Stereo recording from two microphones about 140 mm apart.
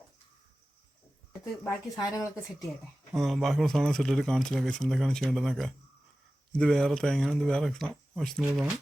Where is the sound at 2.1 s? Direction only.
20° left (ahead or behind).